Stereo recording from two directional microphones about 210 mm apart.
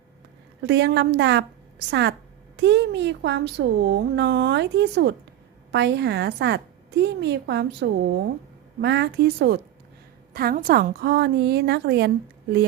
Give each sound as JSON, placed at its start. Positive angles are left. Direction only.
{"t": 0.7, "sound": "a woman's voice", "side_deg": -55}